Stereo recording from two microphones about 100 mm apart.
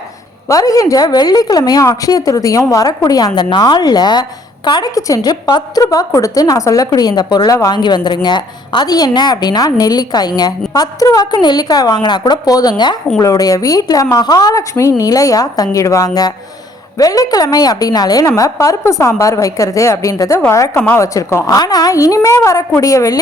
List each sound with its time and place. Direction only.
0.4 s a woman's voice: 35° left (ahead or behind)
4.9 s a woman's voice: 35° left (ahead or behind)
7.8 s a woman's voice: 45° left (ahead or behind)
13.1 s a woman's voice: 35° left (ahead or behind)
20.7 s speech: 20° left (ahead or behind)
21.0 s speech: 30° left (ahead or behind)
21.4 s a woman's voice: 40° left (ahead or behind)